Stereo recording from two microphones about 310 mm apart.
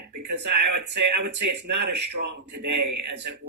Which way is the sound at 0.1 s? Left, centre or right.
Right.